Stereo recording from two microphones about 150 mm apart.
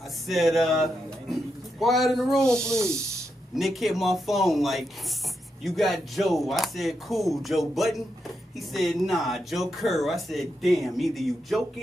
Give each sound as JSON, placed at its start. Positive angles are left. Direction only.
{"t": 0.3, "sound": "speech", "side_deg": 0}